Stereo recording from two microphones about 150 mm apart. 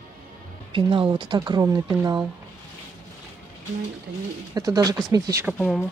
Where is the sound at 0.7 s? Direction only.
35° right (ahead or behind).